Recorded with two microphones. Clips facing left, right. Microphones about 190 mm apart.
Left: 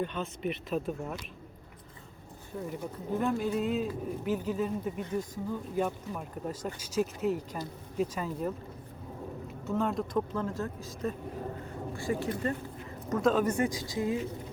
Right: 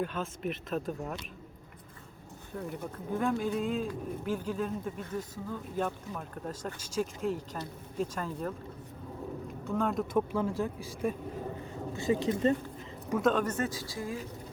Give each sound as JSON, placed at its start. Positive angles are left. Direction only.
{"t": 0.0, "sound": "speech", "side_deg": -5}
{"t": 2.5, "sound": "speech", "side_deg": 0}
{"t": 9.6, "sound": "speech", "side_deg": 0}
{"t": 13.1, "sound": "a man's voice", "side_deg": -5}
{"t": 13.3, "sound": "speech", "side_deg": 10}